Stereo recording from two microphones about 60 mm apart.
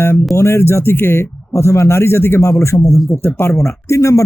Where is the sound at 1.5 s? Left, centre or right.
Left.